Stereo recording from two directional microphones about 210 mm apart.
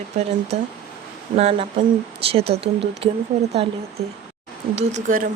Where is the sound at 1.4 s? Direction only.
30° right (ahead or behind).